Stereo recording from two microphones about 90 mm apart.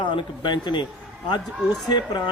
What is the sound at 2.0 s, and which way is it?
Speech, 55° left (ahead or behind).